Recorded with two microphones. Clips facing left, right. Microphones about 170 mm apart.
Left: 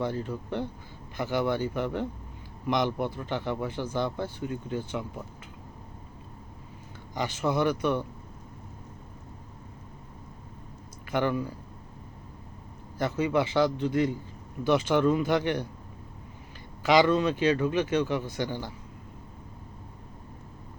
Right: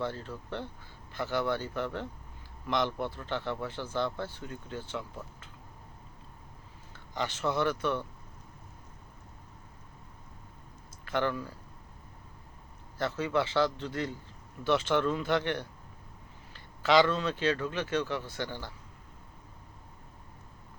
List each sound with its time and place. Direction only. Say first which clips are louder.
0.0 s speech: left 5 dB; 15° left (ahead or behind)
7.1 s speech: left 3 dB; 15° left (ahead or behind)
11.0 s speech: left 4 dB; 15° left (ahead or behind)
13.0 s speech: left 4 dB; 15° left (ahead or behind)
16.8 s speech: left 3 dB; 15° left (ahead or behind)